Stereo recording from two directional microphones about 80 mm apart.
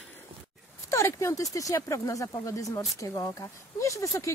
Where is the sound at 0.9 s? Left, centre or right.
Left.